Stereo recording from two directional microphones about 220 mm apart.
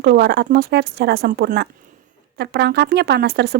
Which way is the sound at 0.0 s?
50° right (ahead or behind).